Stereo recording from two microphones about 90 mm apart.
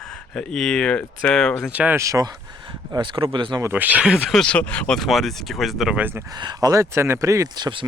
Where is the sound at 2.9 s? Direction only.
65° right (ahead or behind).